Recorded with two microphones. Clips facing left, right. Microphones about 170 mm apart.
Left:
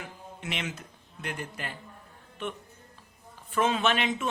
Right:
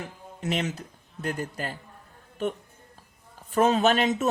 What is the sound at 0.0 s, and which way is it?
Speech, 40° right (ahead or behind).